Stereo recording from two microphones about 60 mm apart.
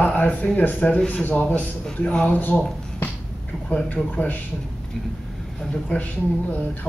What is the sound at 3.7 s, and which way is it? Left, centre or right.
Speech, left.